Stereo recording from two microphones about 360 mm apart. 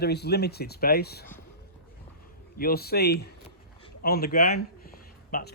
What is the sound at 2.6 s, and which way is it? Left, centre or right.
A man's voice, left.